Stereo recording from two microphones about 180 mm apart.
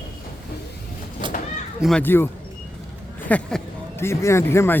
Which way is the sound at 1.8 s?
5° left (ahead or behind).